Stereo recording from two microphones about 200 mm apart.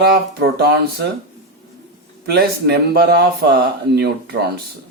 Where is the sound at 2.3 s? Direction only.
55° right (ahead or behind).